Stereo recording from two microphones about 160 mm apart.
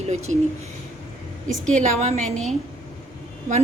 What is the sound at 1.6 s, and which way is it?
Speech, 45° right (ahead or behind).